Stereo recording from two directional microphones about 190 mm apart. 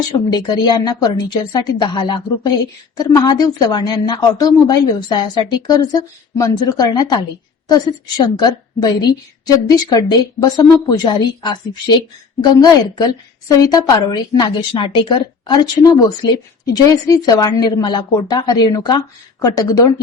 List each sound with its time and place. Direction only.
0.1 s a woman's voice: 20° left (ahead or behind)